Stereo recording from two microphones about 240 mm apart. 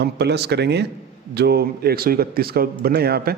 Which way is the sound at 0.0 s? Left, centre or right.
Right.